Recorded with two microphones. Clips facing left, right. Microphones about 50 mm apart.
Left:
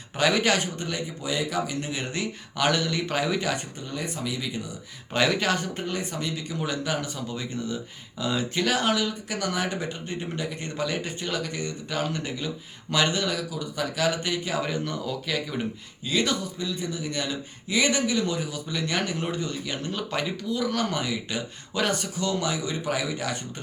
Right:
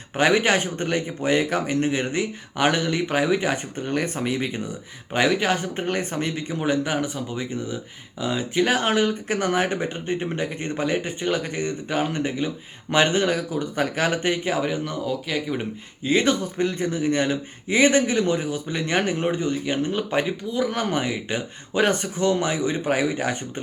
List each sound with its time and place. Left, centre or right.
0.2 s a man's voice: right
3.8 s speech: right
5.1 s speech: centre
5.8 s speech: right; by 8.6 s centre
8.6 s a man's voice: right
14.6 s speech: centre
16.0 s a man's voice: right
16.6 s a man's voice: right